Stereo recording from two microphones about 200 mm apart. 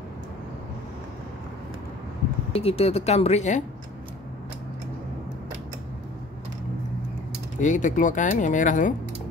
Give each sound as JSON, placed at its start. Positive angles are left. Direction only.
{"t": 2.5, "sound": "speech", "side_deg": 30}
{"t": 7.6, "sound": "speech", "side_deg": 40}